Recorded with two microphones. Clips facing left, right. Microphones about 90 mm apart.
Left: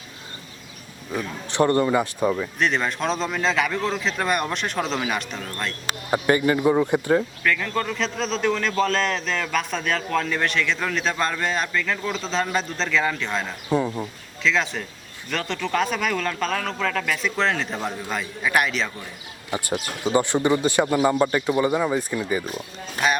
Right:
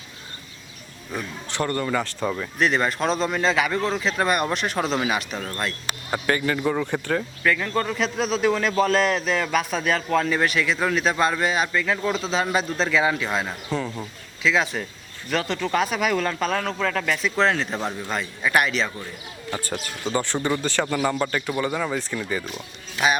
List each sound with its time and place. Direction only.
1.5 s speech: 20° left (ahead or behind)
2.6 s a man's voice: centre (ahead or behind)
6.1 s speech: 20° left (ahead or behind)
7.4 s a man's voice: 5° right (ahead or behind)
13.7 s a sound: 15° left (ahead or behind)
14.4 s a man's voice: 5° right (ahead or behind)
19.5 s speech: 15° left (ahead or behind)
22.5 s a man's voice: 5° right (ahead or behind)